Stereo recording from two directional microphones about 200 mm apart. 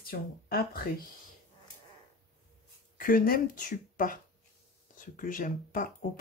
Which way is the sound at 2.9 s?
45° left (ahead or behind).